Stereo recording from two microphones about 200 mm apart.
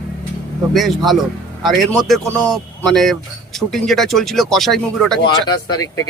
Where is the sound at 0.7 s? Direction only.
Centre (ahead or behind).